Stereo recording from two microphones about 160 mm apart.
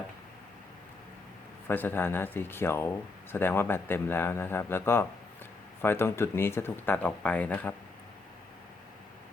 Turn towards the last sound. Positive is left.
turn(degrees=10)  # may be behind; listen again after turning